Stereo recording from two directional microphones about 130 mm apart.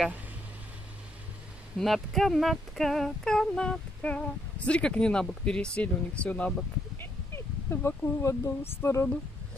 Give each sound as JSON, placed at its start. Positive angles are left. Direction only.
{"t": 1.8, "sound": "speech", "side_deg": 0}